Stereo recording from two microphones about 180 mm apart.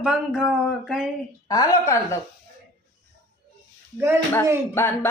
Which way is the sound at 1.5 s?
20° left (ahead or behind).